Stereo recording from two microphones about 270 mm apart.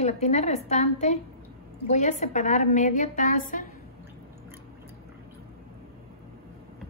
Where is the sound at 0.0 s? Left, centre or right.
Left.